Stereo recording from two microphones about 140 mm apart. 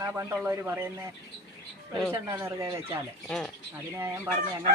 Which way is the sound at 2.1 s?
20° right (ahead or behind).